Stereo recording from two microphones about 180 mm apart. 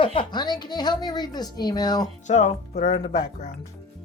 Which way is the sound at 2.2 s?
40° left (ahead or behind).